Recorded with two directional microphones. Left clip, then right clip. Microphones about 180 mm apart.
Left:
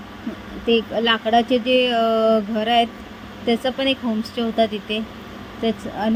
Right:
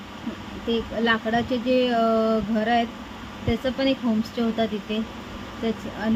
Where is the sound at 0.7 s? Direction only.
25° left (ahead or behind).